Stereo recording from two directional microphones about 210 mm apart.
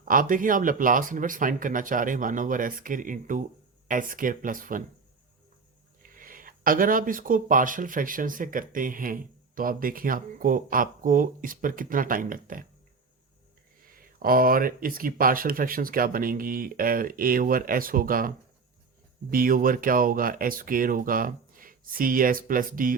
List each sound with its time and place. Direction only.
0.0 s speech: 40° right (ahead or behind)
6.0 s speech: 40° right (ahead or behind)
13.8 s speech: 45° right (ahead or behind)